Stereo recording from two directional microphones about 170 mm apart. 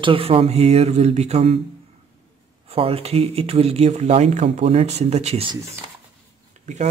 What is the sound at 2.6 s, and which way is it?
Speech, 35° right (ahead or behind).